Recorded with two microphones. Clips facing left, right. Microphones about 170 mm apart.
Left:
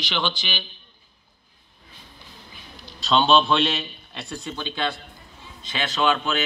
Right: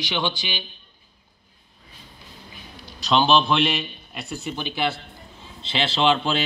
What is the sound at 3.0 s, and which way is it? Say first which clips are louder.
Speech: even; centre (ahead or behind).